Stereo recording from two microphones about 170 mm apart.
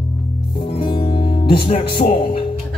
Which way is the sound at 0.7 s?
25° left (ahead or behind).